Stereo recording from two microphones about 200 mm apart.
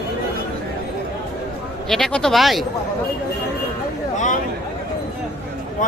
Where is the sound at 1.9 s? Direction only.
5° left (ahead or behind).